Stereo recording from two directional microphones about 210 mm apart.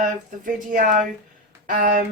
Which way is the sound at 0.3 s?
40° right (ahead or behind).